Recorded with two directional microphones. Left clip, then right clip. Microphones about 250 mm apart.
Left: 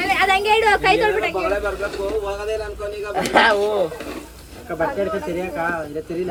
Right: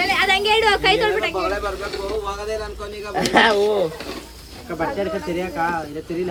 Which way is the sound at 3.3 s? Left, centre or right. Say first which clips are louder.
Even; right.